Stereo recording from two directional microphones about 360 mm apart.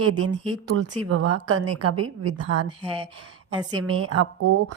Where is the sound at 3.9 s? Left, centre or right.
Right.